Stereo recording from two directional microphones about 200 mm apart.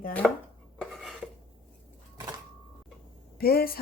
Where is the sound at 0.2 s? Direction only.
5° left (ahead or behind).